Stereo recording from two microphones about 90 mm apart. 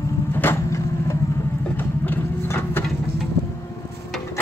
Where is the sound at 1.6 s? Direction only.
20° left (ahead or behind).